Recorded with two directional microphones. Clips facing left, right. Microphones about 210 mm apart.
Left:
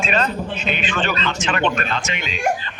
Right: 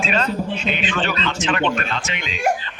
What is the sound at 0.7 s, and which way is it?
A man's voice, 45° left (ahead or behind).